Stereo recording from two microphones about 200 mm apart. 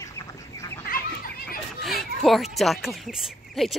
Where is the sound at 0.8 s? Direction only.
45° left (ahead or behind).